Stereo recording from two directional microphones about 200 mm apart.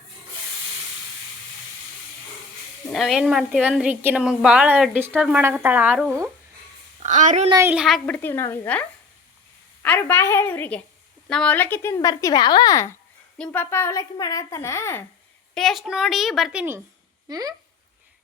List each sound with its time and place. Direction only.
2.9 s a woman's voice: centre (ahead or behind)
7.0 s a woman's voice: 40° right (ahead or behind)
7.5 s speech: 10° right (ahead or behind); by 15.0 s 15° left (ahead or behind)
15.5 s a woman's voice: centre (ahead or behind)
17.2 s speech: 20° right (ahead or behind)